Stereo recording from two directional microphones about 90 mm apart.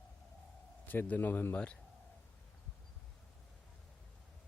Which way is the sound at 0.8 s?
20° left (ahead or behind).